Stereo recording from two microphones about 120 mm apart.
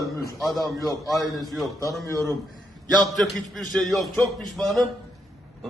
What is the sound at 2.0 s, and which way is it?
Speech, 25° left (ahead or behind).